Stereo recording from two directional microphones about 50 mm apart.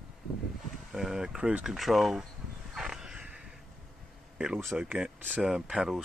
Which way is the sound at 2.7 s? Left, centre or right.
Centre.